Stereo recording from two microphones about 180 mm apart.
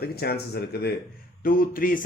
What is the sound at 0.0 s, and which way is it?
Speech, 60° left (ahead or behind).